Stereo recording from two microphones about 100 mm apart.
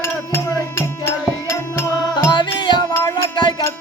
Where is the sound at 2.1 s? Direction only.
50° left (ahead or behind).